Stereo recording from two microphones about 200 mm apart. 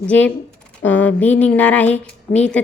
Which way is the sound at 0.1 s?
5° left (ahead or behind).